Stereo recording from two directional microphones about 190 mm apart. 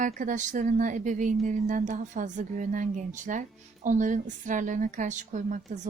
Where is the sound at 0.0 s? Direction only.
45° right (ahead or behind).